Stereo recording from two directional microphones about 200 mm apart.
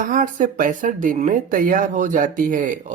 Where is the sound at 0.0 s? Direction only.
40° right (ahead or behind).